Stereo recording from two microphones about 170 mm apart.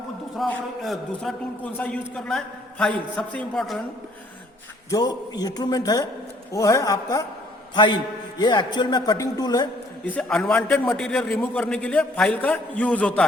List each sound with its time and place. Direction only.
0.3 s a man's voice: 5° left (ahead or behind)
4.9 s speech: 25° left (ahead or behind)
8.4 s speech: 25° left (ahead or behind)
10.1 s a man's voice: 5° left (ahead or behind)